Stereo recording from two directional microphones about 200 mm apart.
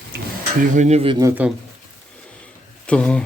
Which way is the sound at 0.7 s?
35° right (ahead or behind).